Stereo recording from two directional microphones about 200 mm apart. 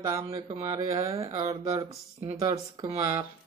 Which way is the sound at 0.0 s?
20° right (ahead or behind).